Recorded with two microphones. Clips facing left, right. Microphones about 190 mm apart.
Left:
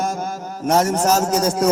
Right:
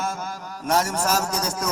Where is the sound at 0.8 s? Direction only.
45° left (ahead or behind).